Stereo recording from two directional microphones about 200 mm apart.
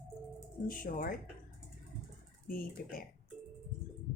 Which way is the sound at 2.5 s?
45° left (ahead or behind).